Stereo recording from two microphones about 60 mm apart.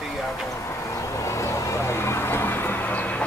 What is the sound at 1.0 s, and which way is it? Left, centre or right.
Vehicle, left.